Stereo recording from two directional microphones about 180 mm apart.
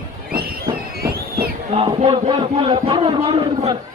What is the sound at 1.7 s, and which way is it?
A man's voice, 30° right (ahead or behind).